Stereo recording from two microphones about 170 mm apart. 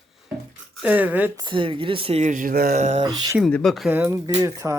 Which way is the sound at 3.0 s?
25° right (ahead or behind).